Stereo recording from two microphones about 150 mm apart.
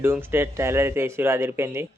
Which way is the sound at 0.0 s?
15° right (ahead or behind).